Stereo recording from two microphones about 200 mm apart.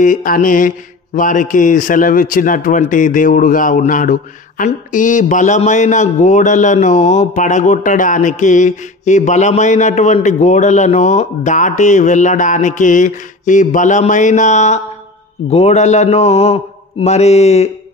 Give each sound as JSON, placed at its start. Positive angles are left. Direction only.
{"t": 0.0, "sound": "mantra", "side_deg": 40}